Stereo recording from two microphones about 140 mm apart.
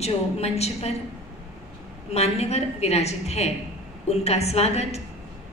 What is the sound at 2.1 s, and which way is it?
A woman's voice, 50° left (ahead or behind).